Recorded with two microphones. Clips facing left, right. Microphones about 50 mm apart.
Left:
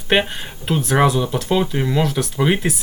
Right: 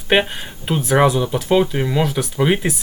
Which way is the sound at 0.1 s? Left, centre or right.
Centre.